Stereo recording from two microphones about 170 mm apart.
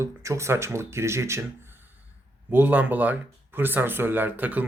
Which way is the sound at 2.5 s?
10° right (ahead or behind).